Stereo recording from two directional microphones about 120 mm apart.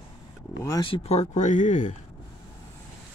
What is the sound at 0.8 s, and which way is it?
Speech, 55° left (ahead or behind).